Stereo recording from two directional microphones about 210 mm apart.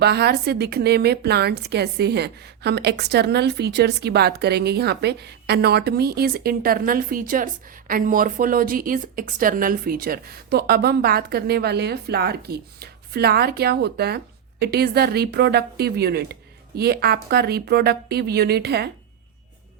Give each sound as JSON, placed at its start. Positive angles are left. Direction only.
{"t": 0.0, "sound": "a woman's voice", "side_deg": -50}